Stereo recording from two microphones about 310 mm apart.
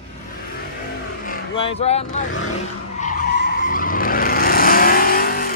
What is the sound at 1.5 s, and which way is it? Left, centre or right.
Vehicle, centre.